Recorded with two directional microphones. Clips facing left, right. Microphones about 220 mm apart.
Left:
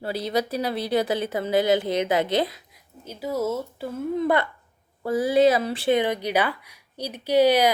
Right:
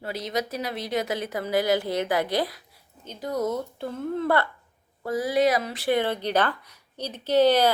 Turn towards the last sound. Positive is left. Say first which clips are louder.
# left 1 dB
turn(degrees=10)  # may be behind; listen again after turning